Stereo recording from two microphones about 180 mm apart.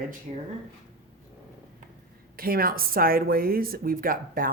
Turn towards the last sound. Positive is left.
turn(degrees=-50)  # may be behind; listen again after turning